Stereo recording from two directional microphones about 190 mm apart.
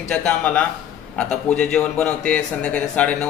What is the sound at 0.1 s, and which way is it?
A man's voice, 5° left (ahead or behind).